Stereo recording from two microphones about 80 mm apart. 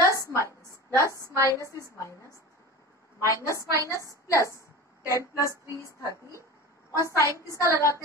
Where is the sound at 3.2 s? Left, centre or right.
Left.